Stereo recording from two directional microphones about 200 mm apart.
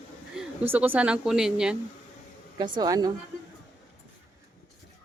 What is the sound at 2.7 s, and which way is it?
Speech, 20° right (ahead or behind).